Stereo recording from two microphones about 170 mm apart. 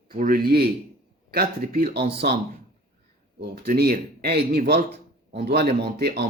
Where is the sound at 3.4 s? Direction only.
65° right (ahead or behind).